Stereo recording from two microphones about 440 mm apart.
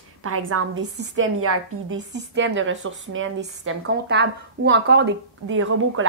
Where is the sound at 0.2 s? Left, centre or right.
Right.